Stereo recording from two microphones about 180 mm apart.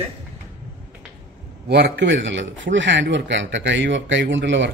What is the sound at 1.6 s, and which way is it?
A man's voice, 70° right (ahead or behind).